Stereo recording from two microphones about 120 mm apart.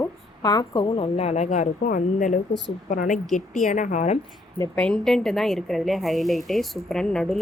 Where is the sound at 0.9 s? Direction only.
55° left (ahead or behind); by 4.1 s 80° left.